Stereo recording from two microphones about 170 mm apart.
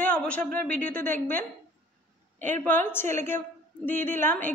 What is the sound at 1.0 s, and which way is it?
Speech, 10° left (ahead or behind).